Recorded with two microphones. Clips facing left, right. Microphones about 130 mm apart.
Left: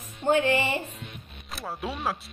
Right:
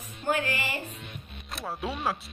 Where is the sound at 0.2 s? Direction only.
25° left (ahead or behind).